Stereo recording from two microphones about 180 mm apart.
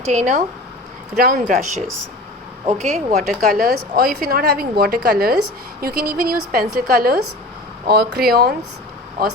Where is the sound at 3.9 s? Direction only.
50° right (ahead or behind).